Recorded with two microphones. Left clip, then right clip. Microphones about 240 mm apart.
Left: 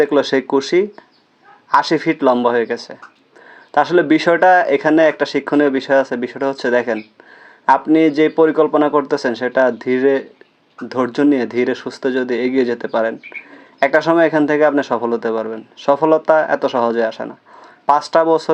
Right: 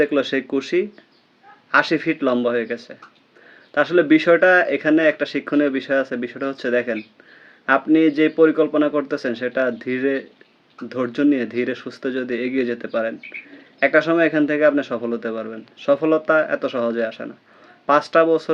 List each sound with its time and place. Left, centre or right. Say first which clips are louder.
0.1 s speech: left 5 dB; centre
2.0 s speech: left 6 dB; centre
14.0 s speech: left 4 dB; centre